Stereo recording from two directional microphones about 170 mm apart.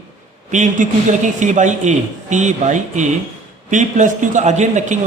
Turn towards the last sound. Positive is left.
turn(degrees=-45)  # may be behind; listen again after turning